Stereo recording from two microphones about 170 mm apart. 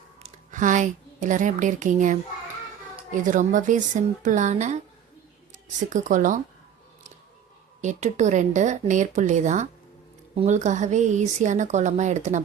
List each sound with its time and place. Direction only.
0.2 s a woman's voice: 50° right (ahead or behind)
3.2 s speech: 50° right (ahead or behind)
5.9 s speech: 50° right (ahead or behind)
7.8 s speech: 45° right (ahead or behind)